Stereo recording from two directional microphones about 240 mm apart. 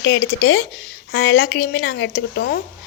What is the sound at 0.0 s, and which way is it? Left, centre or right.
A woman's voice, left.